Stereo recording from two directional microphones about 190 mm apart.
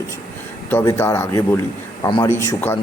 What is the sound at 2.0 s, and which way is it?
Speech, 25° left (ahead or behind).